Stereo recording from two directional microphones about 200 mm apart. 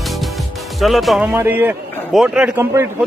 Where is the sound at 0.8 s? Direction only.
Centre (ahead or behind).